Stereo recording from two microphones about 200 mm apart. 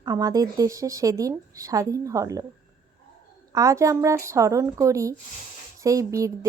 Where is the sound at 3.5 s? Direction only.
15° right (ahead or behind).